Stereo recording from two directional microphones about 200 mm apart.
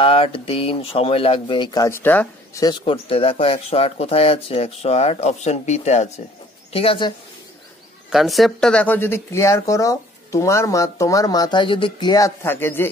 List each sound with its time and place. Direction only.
0.0 s speech: 30° left (ahead or behind)
8.1 s speech: centre (ahead or behind)